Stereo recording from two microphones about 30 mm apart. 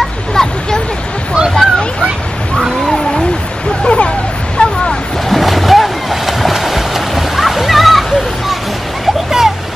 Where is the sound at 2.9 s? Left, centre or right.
Centre.